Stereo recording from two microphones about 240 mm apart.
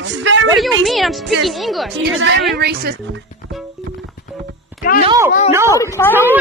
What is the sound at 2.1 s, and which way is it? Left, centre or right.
Speech, right.